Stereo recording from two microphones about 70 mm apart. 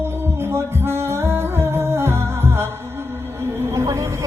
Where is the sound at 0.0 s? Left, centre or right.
Right.